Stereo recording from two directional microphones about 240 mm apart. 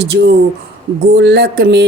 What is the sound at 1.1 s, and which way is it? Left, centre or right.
Speech, right.